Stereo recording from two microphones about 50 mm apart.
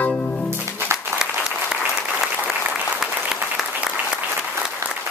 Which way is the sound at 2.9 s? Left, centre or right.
Centre.